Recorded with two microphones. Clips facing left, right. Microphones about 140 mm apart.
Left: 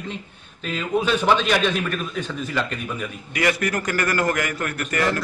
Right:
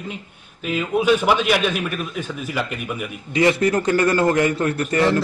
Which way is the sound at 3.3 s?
25° right (ahead or behind).